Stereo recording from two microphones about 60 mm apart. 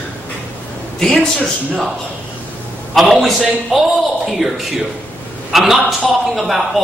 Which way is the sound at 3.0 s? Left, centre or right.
Centre.